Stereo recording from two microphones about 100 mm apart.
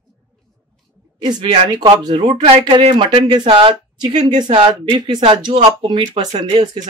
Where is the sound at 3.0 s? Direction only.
50° right (ahead or behind).